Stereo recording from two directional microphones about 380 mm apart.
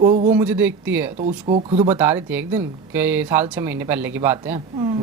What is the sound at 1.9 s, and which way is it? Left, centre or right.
A woman's voice, centre.